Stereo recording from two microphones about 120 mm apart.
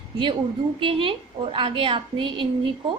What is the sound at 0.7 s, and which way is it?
A woman's voice, 45° right (ahead or behind).